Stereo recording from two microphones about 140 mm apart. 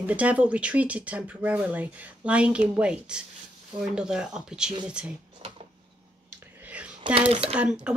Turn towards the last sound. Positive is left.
turn(degrees=-5)  # may be behind; listen again after turning